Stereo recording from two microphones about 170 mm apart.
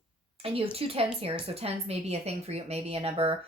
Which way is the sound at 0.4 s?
35° right (ahead or behind).